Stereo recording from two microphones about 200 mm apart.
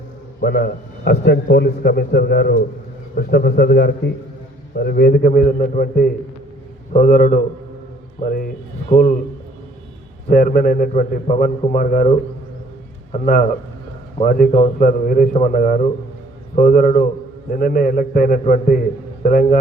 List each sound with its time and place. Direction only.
0.4 s a man's voice: 55° left (ahead or behind)
10.2 s a man's voice: 45° left (ahead or behind)